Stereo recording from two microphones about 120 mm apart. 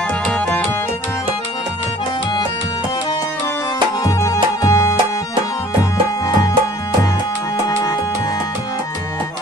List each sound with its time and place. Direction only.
4.0 s music: 30° left (ahead or behind)